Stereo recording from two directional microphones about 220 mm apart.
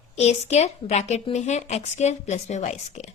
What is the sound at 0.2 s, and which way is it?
A woman's voice, 30° left (ahead or behind).